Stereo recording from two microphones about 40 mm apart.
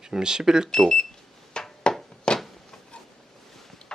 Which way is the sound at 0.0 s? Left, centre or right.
Centre.